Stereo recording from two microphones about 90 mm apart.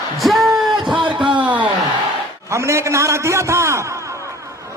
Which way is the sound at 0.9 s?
65° right (ahead or behind).